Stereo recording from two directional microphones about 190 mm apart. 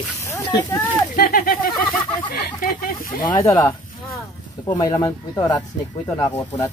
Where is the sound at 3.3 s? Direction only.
20° left (ahead or behind).